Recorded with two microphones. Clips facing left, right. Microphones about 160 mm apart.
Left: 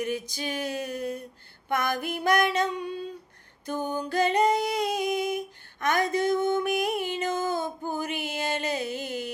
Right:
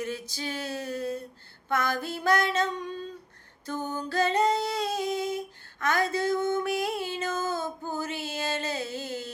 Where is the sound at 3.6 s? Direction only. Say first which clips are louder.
Left 3 dB; 15° left (ahead or behind).